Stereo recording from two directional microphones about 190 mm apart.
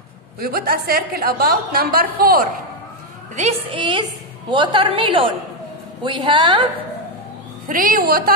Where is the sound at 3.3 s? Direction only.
35° right (ahead or behind).